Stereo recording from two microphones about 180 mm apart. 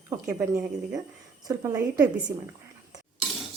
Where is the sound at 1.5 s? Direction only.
20° right (ahead or behind).